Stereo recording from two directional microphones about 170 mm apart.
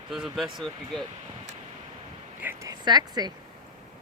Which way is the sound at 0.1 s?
Centre (ahead or behind).